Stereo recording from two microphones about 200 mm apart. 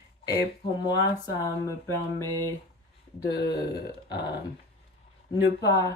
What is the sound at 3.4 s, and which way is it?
Speech, 55° left (ahead or behind).